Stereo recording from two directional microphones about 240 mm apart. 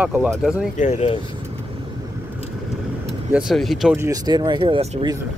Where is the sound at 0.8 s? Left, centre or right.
Left.